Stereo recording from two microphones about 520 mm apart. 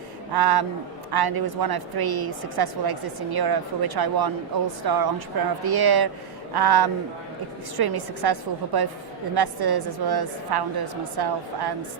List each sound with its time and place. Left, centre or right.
0.3 s a woman's voice: right